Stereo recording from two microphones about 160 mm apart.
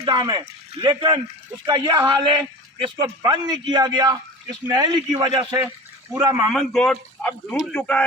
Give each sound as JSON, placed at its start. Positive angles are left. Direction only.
{"t": 0.0, "sound": "a man's voice", "side_deg": -25}
{"t": 5.5, "sound": "water", "side_deg": -10}
{"t": 6.5, "sound": "speech", "side_deg": 0}
{"t": 7.8, "sound": "a man's voice", "side_deg": 10}